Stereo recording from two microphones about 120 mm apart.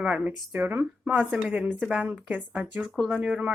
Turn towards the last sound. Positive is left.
turn(degrees=-5)  # may be behind; listen again after turning